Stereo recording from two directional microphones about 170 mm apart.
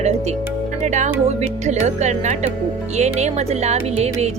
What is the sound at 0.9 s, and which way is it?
Speech, 45° right (ahead or behind).